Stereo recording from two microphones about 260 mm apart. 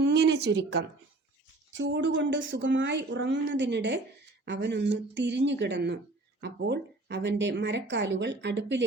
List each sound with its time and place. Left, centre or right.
0.0 s speech: right